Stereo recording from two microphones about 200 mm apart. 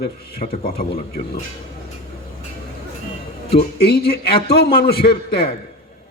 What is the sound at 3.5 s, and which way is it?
A man's voice, 50° left (ahead or behind).